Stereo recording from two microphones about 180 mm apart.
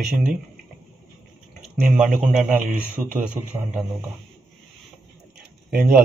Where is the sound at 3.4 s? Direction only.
15° right (ahead or behind).